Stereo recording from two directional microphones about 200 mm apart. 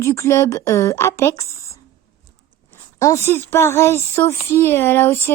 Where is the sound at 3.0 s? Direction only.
15° left (ahead or behind).